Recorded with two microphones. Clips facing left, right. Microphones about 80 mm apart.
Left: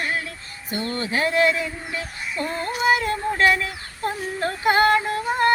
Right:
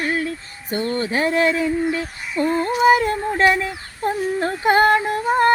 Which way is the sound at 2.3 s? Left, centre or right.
Right.